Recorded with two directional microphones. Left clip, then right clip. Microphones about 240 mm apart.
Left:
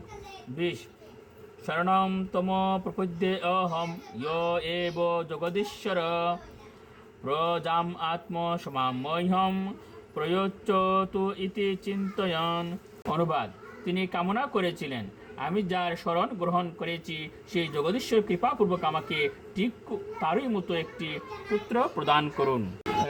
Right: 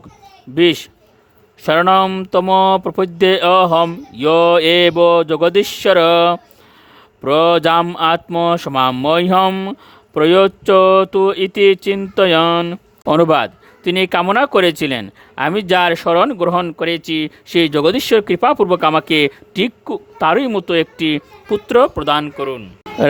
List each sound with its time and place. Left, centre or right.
1.6 s speech: right
21.7 s speech: right
22.4 s speech: centre